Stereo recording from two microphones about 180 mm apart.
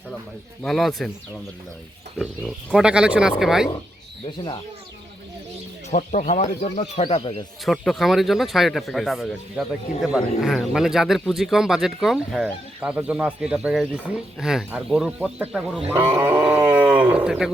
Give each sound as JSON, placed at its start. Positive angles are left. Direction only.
{"t": 0.6, "sound": "speech", "side_deg": 0}
{"t": 2.1, "sound": "speech", "side_deg": 5}
{"t": 5.9, "sound": "speech", "side_deg": 40}
{"t": 7.6, "sound": "speech", "side_deg": 0}